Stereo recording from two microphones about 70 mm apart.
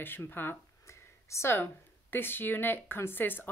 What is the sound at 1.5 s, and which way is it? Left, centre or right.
Speech, left.